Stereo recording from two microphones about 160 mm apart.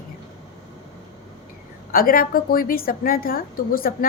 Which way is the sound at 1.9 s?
65° left (ahead or behind).